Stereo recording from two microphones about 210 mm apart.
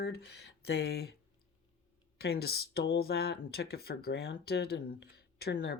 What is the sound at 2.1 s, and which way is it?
Speech, 50° left (ahead or behind).